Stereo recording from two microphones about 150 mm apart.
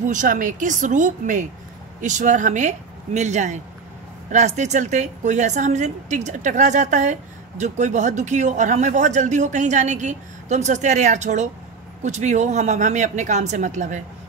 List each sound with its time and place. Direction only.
0.1 s a woman's voice: 60° right (ahead or behind)